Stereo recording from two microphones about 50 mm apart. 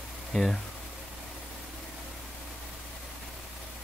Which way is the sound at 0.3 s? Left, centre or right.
Centre.